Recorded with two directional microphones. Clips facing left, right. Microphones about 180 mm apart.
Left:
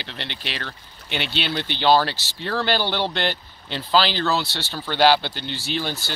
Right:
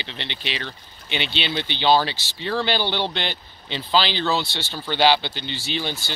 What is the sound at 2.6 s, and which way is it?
Speech, 10° left (ahead or behind).